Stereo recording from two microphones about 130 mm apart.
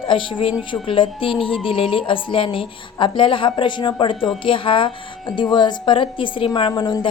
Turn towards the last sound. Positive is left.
turn(degrees=35)  # may be behind; listen again after turning